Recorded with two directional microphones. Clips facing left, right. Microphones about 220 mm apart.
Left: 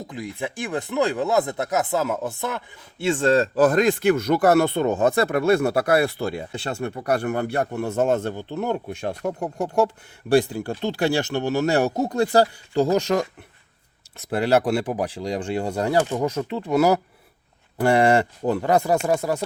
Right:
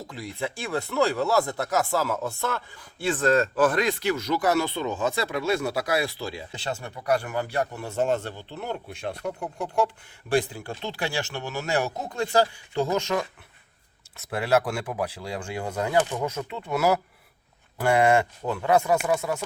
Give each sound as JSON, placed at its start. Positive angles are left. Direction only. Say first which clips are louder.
{"t": 0.1, "sound": "speech", "louder": "left 1 dB", "side_deg": 15}
{"t": 14.3, "sound": "speech", "louder": "left 4 dB", "side_deg": 35}